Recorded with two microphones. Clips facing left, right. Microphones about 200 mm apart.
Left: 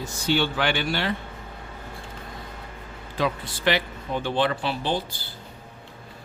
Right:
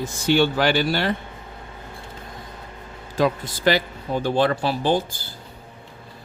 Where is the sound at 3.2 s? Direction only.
45° right (ahead or behind).